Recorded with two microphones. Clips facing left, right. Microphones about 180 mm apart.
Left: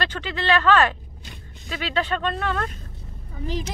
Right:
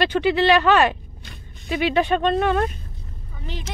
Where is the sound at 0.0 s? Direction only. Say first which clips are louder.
Right 9 dB; 15° right (ahead or behind).